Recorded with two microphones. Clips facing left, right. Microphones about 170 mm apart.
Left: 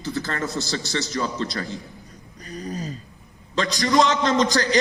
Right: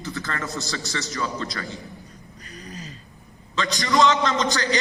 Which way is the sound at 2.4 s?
40° left (ahead or behind).